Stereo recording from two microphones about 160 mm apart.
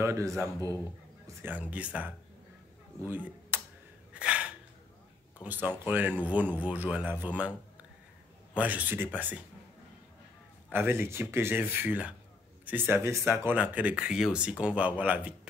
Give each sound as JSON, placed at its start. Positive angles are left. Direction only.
{"t": 0.0, "sound": "speech", "side_deg": -20}
{"t": 3.1, "sound": "a sound", "side_deg": -15}
{"t": 4.1, "sound": "sneeze", "side_deg": -5}
{"t": 5.4, "sound": "speech", "side_deg": -10}
{"t": 8.5, "sound": "speech", "side_deg": -10}
{"t": 10.7, "sound": "speech", "side_deg": -15}